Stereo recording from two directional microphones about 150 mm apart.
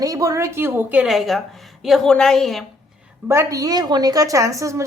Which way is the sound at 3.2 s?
20° right (ahead or behind).